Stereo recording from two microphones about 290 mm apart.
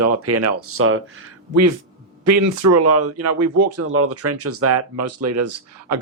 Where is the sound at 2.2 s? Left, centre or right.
Right.